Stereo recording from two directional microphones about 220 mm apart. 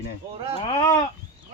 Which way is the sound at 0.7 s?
20° left (ahead or behind).